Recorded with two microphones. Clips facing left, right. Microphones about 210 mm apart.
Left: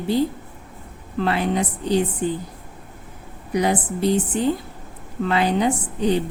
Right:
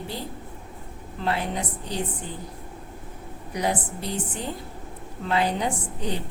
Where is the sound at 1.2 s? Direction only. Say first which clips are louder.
Left 6 dB; 80° left.